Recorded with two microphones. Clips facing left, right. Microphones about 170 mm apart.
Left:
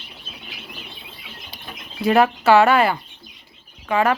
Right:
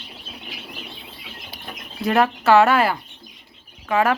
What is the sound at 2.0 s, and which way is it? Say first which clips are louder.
Speech: left 2 dB; centre (ahead or behind).